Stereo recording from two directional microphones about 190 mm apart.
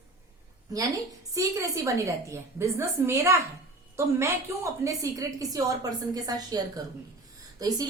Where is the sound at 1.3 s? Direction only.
15° right (ahead or behind).